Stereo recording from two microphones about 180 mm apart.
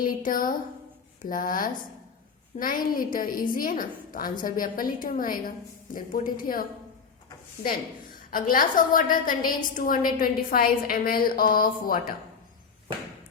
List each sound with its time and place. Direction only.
0.0 s a woman's voice: 50° left (ahead or behind)
8.3 s a woman's voice: 50° left (ahead or behind)